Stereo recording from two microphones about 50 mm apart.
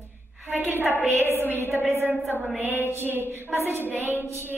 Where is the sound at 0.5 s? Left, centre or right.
Right.